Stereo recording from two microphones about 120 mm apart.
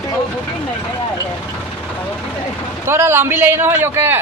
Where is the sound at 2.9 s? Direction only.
20° right (ahead or behind).